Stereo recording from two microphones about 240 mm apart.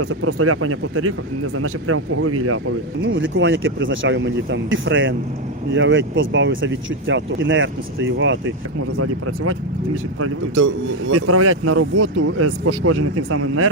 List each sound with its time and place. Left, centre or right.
0.0 s speech: right
9.0 s speech: right
11.1 s speech: right